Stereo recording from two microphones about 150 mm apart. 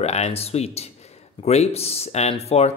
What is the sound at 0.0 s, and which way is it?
Speech, 45° left (ahead or behind).